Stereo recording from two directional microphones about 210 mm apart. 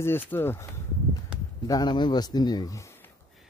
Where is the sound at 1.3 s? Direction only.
5° right (ahead or behind).